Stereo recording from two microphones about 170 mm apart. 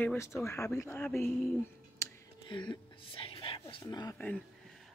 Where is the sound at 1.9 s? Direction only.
20° left (ahead or behind).